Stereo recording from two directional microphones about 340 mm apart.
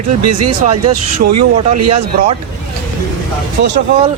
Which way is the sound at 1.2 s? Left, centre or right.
Right.